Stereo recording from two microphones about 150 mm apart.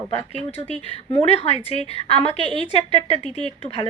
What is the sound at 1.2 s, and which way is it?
Speech, 45° left (ahead or behind).